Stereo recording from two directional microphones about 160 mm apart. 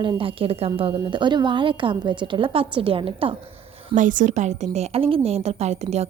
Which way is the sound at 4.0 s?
50° right (ahead or behind).